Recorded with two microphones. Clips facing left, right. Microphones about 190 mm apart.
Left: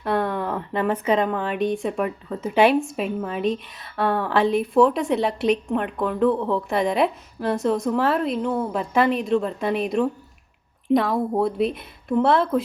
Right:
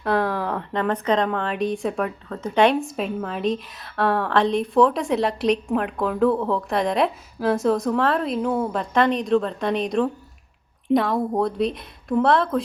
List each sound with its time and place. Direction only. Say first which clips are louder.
0.0 s speech: right 1 dB; centre (ahead or behind)